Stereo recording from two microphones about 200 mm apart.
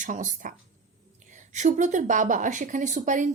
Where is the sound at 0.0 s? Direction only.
40° right (ahead or behind).